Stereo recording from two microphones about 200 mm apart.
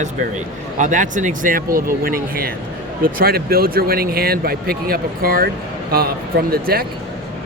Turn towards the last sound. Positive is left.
turn(degrees=-50)  # may be behind; listen again after turning